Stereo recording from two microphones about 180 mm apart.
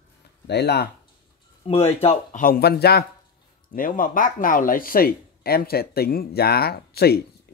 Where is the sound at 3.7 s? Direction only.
50° left (ahead or behind).